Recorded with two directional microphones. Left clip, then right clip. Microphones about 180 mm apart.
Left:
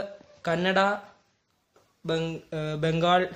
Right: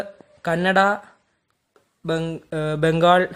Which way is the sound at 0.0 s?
35° right (ahead or behind).